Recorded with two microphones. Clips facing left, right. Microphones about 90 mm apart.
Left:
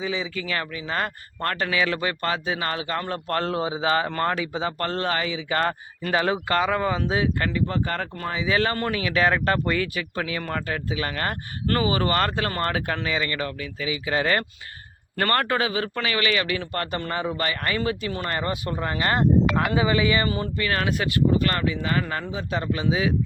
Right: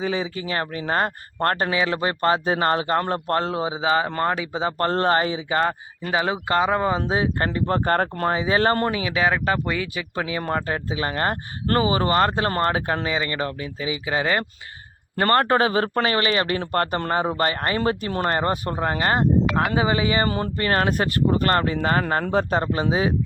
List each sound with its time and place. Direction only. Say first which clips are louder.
0.0 s speech: right 3 dB; 45° right (ahead or behind)
0.3 s a man's voice: right 2 dB; 35° right (ahead or behind)
3.4 s speech: right 1 dB; 20° right (ahead or behind); by 5.4 s 35° right (ahead or behind)
5.5 s a man's voice: right 2 dB; 20° right (ahead or behind); by 8.9 s 40° right (ahead or behind)
8.9 s speech: even; 20° right (ahead or behind)
15.1 s a man's voice: right 4 dB; 25° right (ahead or behind)
20.2 s a man's voice: right 3 dB; 45° right (ahead or behind)